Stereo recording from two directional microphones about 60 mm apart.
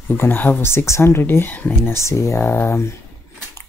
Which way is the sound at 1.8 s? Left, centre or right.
Left.